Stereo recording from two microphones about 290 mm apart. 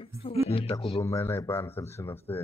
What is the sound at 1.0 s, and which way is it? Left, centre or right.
Speech, centre.